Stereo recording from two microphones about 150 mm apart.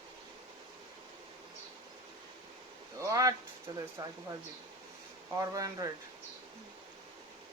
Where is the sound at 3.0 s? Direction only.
20° right (ahead or behind).